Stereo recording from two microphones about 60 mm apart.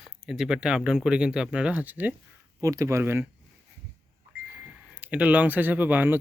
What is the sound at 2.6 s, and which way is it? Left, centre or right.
Speech, right.